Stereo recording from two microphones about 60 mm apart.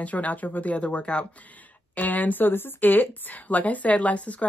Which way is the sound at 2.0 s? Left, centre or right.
Left.